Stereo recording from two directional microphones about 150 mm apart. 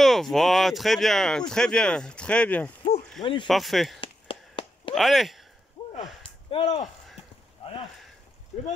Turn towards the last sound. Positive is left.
turn(degrees=40)  # may be behind; listen again after turning